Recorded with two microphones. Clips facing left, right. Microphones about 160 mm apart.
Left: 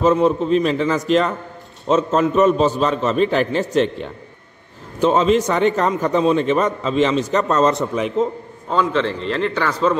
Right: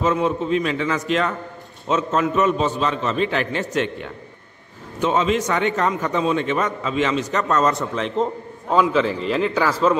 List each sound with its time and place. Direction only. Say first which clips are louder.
0.0 s a man's voice: left 5 dB; 35° left (ahead or behind)
5.0 s a man's voice: left 4 dB; 35° left (ahead or behind)
8.2 s a man's voice: left 2 dB; 5° right (ahead or behind)